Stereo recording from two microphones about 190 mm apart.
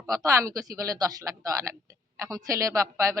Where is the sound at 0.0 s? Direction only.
15° right (ahead or behind).